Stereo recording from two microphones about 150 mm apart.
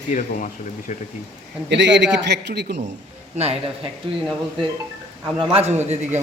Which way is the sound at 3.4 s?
40° right (ahead or behind).